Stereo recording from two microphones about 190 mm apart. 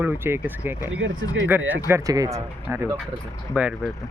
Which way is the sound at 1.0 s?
90° right.